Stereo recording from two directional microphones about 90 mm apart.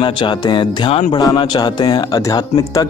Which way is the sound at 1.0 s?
55° left (ahead or behind).